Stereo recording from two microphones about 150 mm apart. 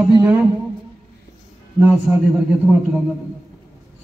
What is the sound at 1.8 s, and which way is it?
Speech, 10° right (ahead or behind).